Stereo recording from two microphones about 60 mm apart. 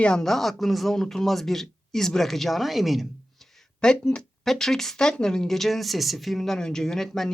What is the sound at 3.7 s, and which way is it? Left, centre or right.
Speech, centre.